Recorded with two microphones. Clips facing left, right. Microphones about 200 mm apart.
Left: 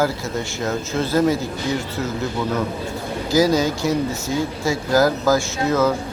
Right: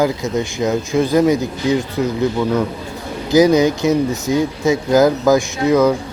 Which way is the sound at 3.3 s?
20° right (ahead or behind).